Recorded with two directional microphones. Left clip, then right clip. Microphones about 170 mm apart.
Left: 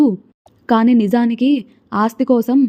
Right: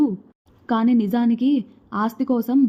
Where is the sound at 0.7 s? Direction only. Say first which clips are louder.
Left 7 dB; 40° left (ahead or behind).